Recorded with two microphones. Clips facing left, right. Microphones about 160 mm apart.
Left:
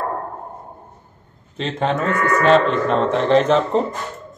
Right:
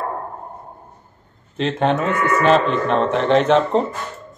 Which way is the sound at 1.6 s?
Centre (ahead or behind).